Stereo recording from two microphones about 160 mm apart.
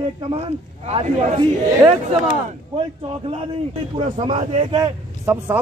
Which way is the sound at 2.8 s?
35° right (ahead or behind).